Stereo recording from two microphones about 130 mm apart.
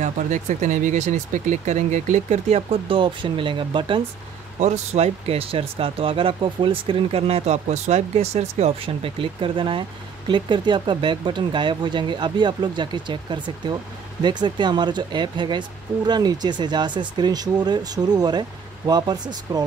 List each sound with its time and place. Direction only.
0.0 s speech: 70° right (ahead or behind); by 4.0 s 40° right (ahead or behind)
4.6 s speech: 60° right (ahead or behind); by 19.6 s 35° right (ahead or behind)